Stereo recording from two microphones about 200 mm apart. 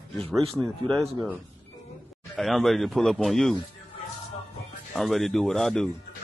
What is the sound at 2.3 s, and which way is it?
Speech, centre (ahead or behind).